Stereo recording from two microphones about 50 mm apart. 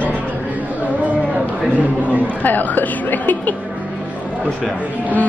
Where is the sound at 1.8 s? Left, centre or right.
Right.